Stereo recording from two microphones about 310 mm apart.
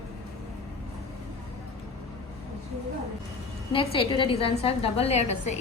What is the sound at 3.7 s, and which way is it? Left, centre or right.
A woman's voice, centre.